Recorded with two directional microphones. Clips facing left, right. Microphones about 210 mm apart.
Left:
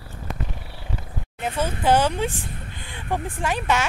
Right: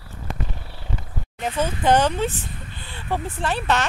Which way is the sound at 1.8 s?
10° left (ahead or behind).